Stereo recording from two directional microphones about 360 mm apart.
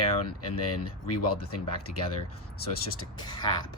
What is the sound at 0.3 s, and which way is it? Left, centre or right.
Speech, left.